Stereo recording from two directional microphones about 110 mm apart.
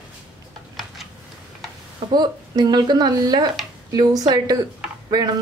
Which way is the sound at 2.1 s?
40° right (ahead or behind).